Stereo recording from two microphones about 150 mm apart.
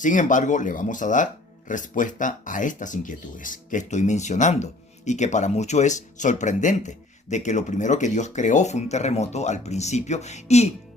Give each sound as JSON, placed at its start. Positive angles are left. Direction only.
{"t": 0.0, "sound": "speech", "side_deg": 60}